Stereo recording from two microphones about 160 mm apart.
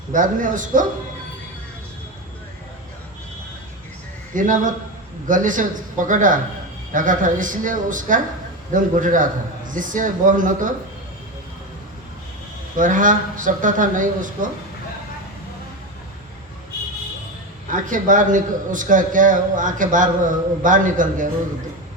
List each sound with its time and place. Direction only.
0.1 s a man's voice: 55° right (ahead or behind)
4.4 s a man's voice: 55° right (ahead or behind)
12.7 s a man's voice: 55° right (ahead or behind)
17.7 s a man's voice: 55° right (ahead or behind)